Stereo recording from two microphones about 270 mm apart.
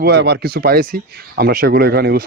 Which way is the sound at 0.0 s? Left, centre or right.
Right.